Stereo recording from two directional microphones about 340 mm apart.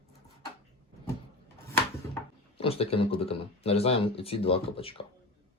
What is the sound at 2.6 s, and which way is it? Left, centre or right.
Speech, centre.